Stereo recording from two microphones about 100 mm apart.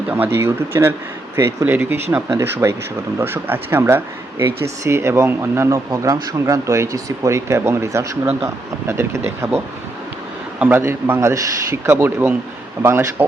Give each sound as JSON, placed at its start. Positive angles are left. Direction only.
{"t": 0.1, "sound": "speech", "side_deg": -20}
{"t": 10.6, "sound": "speech", "side_deg": -20}